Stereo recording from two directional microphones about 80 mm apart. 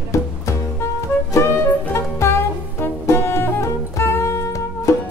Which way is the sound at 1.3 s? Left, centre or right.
Left.